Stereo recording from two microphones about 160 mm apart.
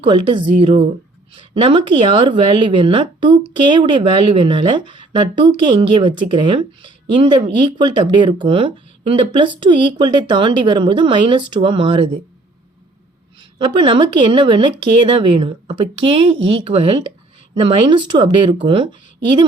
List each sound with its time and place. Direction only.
0.0 s a woman's voice: 30° right (ahead or behind)
13.6 s a woman's voice: 30° right (ahead or behind)